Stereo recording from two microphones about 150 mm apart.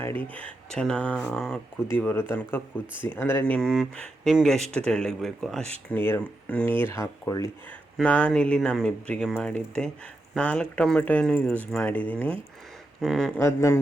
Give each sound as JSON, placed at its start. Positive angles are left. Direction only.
{"t": 0.0, "sound": "speech", "side_deg": 10}
{"t": 1.9, "sound": "speech", "side_deg": 15}
{"t": 5.9, "sound": "speech", "side_deg": 15}
{"t": 8.0, "sound": "speech", "side_deg": 10}
{"t": 13.0, "sound": "speech", "side_deg": 0}
{"t": 13.4, "sound": "speech", "side_deg": 20}